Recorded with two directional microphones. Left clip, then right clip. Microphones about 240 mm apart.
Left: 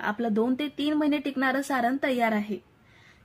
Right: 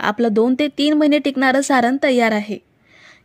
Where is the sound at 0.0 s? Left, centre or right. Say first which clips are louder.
Right 11 dB; right.